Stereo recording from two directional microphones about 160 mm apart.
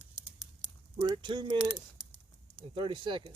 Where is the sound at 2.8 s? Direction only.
30° right (ahead or behind).